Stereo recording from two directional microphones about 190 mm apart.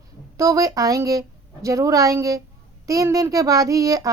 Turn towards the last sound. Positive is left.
turn(degrees=-20)  # may be behind; listen again after turning